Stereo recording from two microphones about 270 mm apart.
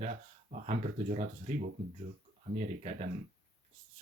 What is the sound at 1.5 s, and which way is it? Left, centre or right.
Speech, right.